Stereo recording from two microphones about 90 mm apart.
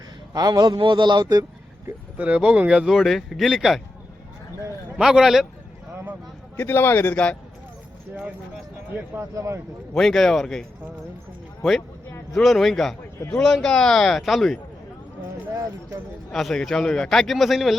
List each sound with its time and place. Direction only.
0.3 s a man's voice: 50° right (ahead or behind)
2.1 s speech: 15° right (ahead or behind); by 3.8 s centre (ahead or behind)
4.9 s speech: 5° right (ahead or behind)
6.6 s a man's voice: 25° left (ahead or behind)
9.3 s speech: 35° right (ahead or behind)
9.9 s speech: 5° left (ahead or behind)
12.3 s speech: centre (ahead or behind)
16.3 s speech: 5° left (ahead or behind)